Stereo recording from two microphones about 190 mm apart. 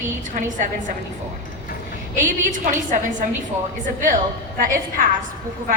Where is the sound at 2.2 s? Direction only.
45° right (ahead or behind).